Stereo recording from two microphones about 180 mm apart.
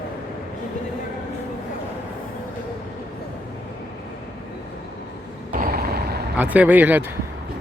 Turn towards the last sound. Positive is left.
turn(degrees=-10)  # may be behind; listen again after turning